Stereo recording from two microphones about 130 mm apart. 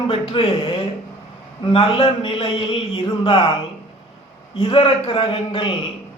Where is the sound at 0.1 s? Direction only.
45° left (ahead or behind).